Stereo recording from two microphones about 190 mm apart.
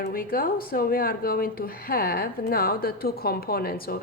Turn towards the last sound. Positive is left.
turn(degrees=50)  # may be behind; listen again after turning